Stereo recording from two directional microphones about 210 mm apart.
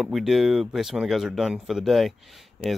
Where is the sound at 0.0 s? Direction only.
Centre (ahead or behind).